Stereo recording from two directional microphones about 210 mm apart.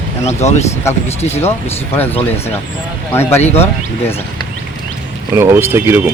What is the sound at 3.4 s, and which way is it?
Speech, 30° left (ahead or behind).